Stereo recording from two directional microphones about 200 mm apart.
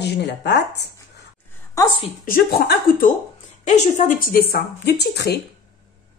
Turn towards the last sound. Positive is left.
turn(degrees=55)  # may be behind; listen again after turning